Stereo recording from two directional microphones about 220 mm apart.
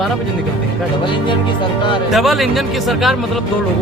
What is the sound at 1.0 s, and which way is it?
Speech, 20° left (ahead or behind).